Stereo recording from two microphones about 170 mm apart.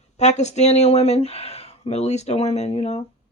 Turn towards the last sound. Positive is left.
turn(degrees=35)  # may be behind; listen again after turning